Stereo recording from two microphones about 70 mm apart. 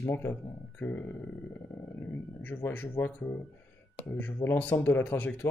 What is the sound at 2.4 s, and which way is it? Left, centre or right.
Speech, left.